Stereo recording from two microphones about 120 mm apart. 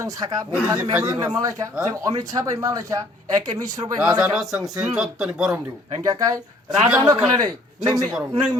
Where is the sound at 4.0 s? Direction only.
5° right (ahead or behind).